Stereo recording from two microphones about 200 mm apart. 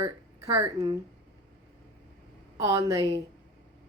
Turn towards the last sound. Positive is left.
turn(degrees=-15)  # may be behind; listen again after turning